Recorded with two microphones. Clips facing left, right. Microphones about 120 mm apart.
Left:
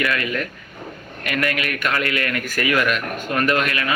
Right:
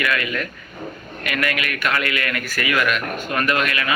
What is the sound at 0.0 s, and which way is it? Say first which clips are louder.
A man's voice: left 1 dB; 35° left (ahead or behind).